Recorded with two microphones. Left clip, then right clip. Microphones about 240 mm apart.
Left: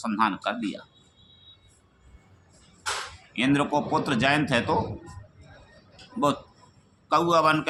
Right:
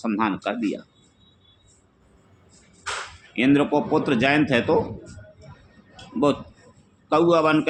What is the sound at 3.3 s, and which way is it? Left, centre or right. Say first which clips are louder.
A man's voice: right 4 dB; centre.